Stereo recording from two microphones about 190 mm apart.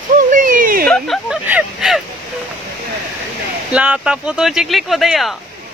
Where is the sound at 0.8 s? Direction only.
5° left (ahead or behind).